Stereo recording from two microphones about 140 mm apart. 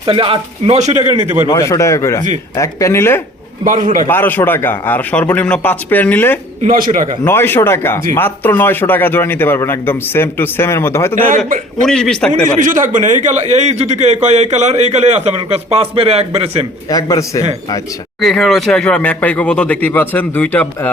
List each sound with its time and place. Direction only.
0.0 s a man's voice: 40° right (ahead or behind)
1.5 s speech: 25° left (ahead or behind)
3.6 s a man's voice: 70° right (ahead or behind)
4.1 s a man's voice: 15° left (ahead or behind)
6.6 s a man's voice: 75° right (ahead or behind)
7.3 s a man's voice: 15° left (ahead or behind)
11.3 s a man's voice: 70° right (ahead or behind)
11.9 s a man's voice: 5° left (ahead or behind)
12.3 s a man's voice: 70° right (ahead or behind); by 16.6 s 50° right (ahead or behind)
16.9 s speech: 25° left (ahead or behind)
18.2 s a man's voice: centre (ahead or behind)